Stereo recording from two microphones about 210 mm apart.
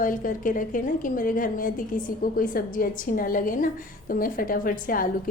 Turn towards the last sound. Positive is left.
turn(degrees=40)  # may be behind; listen again after turning